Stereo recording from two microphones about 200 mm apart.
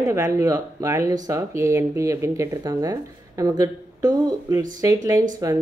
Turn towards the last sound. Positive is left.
turn(degrees=-15)  # may be behind; listen again after turning